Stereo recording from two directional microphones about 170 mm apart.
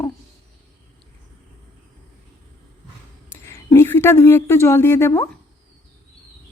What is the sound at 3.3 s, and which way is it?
Speech, 15° left (ahead or behind).